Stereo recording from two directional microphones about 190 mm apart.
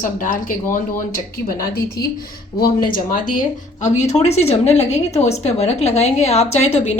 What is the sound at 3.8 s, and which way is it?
A woman's voice, 40° left (ahead or behind).